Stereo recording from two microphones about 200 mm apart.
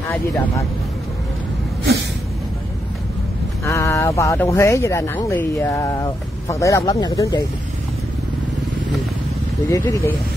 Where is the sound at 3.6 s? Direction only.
15° left (ahead or behind).